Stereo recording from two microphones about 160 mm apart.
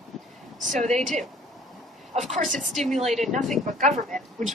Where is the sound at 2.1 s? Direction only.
50° right (ahead or behind).